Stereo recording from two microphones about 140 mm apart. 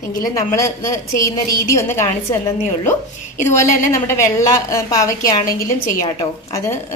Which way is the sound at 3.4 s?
20° left (ahead or behind).